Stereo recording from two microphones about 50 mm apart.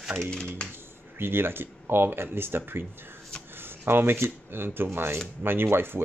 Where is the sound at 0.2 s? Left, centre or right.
Centre.